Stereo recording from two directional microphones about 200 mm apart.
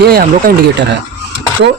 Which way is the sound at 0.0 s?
50° right (ahead or behind).